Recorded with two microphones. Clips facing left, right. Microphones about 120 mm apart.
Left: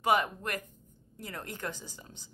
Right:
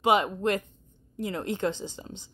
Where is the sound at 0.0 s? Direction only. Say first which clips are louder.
Right 5 dB; 20° right (ahead or behind).